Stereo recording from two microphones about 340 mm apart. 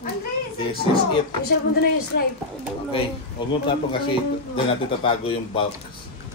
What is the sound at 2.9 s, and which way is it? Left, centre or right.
Speech, centre.